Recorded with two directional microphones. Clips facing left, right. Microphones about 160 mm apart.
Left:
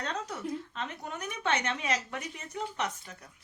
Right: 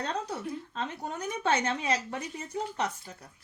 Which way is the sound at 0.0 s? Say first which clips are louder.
Right 3 dB; 30° right (ahead or behind).